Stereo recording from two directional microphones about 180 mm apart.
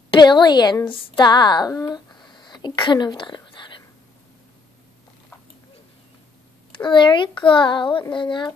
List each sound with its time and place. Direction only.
0.2 s a woman's voice: 25° left (ahead or behind)
6.8 s a child's voice: 25° left (ahead or behind)